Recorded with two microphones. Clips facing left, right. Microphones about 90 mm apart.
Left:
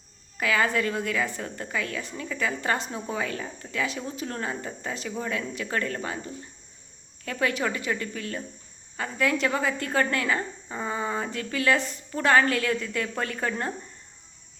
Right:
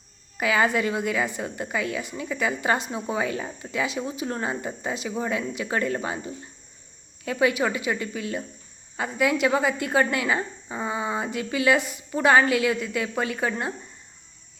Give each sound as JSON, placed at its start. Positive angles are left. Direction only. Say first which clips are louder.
{"t": 0.3, "sound": "a woman's voice", "louder": "right 2 dB", "side_deg": -20}